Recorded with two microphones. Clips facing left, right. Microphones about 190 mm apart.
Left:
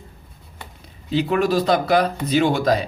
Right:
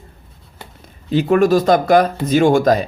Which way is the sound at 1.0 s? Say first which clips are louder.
Right 6 dB; 50° right (ahead or behind).